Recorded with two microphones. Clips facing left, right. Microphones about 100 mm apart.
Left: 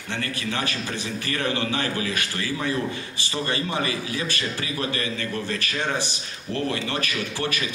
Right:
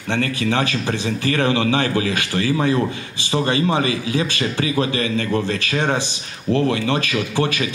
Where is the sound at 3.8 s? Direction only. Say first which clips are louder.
Right 7 dB; 90° right.